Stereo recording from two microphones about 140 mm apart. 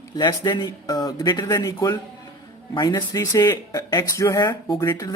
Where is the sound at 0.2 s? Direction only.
30° left (ahead or behind).